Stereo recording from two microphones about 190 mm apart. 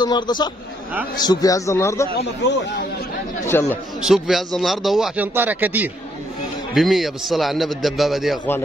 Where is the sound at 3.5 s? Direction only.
10° left (ahead or behind).